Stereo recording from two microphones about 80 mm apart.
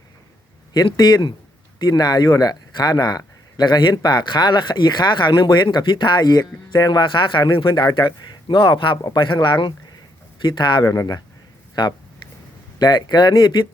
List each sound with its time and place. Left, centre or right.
0.9 s a man's voice: left